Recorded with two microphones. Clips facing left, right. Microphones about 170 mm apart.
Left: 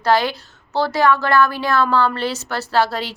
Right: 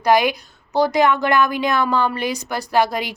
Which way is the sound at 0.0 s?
15° right (ahead or behind).